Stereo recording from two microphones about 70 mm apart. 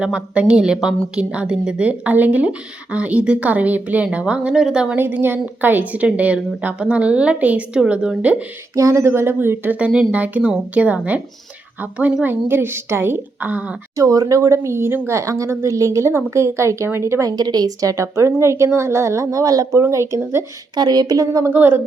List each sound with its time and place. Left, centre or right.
0.0 s a woman's voice: centre
4.9 s a woman's voice: right
8.7 s a woman's voice: right
9.1 s a woman's voice: right
9.7 s a woman's voice: centre
13.9 s a woman's voice: right
17.3 s a woman's voice: right
19.8 s a woman's voice: right
20.7 s a woman's voice: right
21.4 s a woman's voice: right